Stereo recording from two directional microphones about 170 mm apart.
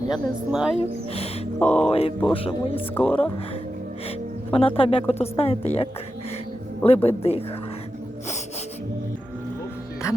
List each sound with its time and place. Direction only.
0.5 s speech: 5° right (ahead or behind)
1.5 s speech: 5° left (ahead or behind)
1.9 s speech: 35° left (ahead or behind)
2.9 s speech: 5° left (ahead or behind)
4.5 s speech: 35° left (ahead or behind)
10.0 s speech: 15° left (ahead or behind)